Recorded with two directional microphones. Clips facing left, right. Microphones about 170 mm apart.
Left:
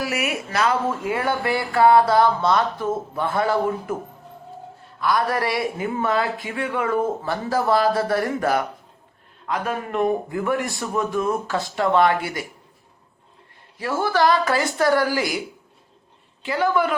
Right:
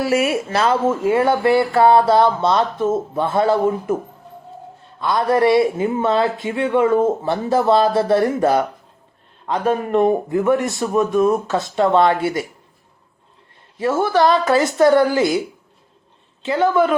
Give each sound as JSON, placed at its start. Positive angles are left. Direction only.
{"t": 0.0, "sound": "speech", "side_deg": -30}
{"t": 4.9, "sound": "speech", "side_deg": -25}
{"t": 13.7, "sound": "speech", "side_deg": -20}
{"t": 16.4, "sound": "speech", "side_deg": -20}